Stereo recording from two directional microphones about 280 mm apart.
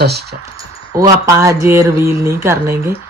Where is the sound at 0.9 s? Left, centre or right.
Centre.